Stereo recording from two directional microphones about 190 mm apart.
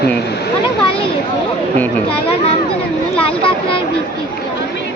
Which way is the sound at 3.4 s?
30° left (ahead or behind).